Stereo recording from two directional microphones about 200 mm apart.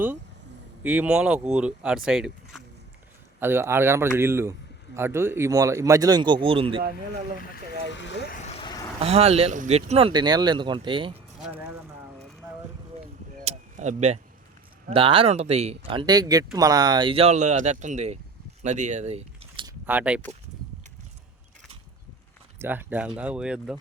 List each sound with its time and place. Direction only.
0.8 s speech: 5° right (ahead or behind); by 6.8 s 25° right (ahead or behind)
7.5 s speech: 65° left (ahead or behind)
8.3 s vehicle: 35° left (ahead or behind)
9.0 s speech: 30° right (ahead or behind)
10.1 s speech: 20° right (ahead or behind)
11.4 s speech: 10° right (ahead or behind)
13.4 s a sound: 35° right (ahead or behind)
14.8 s speech: 25° right (ahead or behind)
18.6 s a sound: 35° right (ahead or behind)
19.8 s speech: 10° right (ahead or behind)
22.5 s speech: 10° right (ahead or behind)